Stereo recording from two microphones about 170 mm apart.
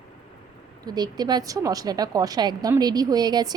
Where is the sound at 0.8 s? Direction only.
25° right (ahead or behind).